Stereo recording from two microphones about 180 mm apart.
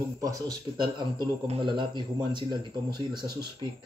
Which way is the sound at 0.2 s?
20° right (ahead or behind).